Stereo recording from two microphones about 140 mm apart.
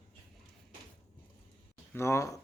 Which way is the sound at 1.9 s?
20° left (ahead or behind).